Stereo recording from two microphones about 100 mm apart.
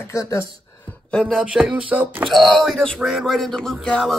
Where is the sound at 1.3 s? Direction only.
10° right (ahead or behind).